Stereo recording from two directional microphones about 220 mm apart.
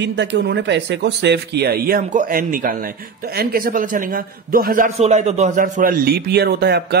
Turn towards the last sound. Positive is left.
turn(degrees=-50)  # may be behind; listen again after turning